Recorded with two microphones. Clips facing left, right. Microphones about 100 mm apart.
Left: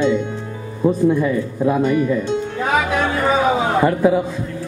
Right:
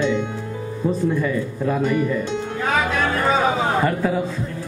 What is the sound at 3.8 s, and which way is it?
Speech, 15° left (ahead or behind).